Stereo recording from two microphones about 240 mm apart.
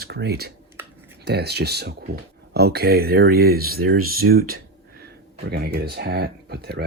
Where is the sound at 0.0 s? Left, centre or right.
Right.